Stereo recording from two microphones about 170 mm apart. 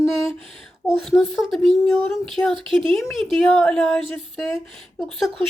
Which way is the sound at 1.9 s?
Centre (ahead or behind).